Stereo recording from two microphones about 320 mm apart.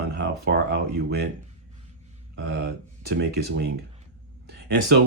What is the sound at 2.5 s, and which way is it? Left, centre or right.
Speech, right.